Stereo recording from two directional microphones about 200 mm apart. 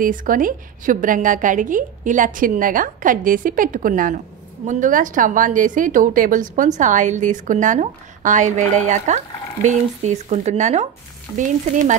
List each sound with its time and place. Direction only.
0.0 s a woman's voice: 40° right (ahead or behind)